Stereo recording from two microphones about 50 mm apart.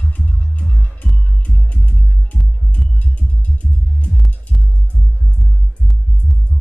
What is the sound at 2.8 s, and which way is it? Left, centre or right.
Music, left.